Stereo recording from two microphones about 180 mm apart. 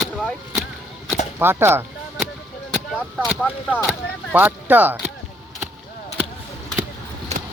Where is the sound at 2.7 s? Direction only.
Centre (ahead or behind).